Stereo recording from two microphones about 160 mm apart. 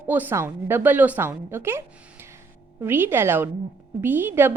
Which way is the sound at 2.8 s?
15° right (ahead or behind).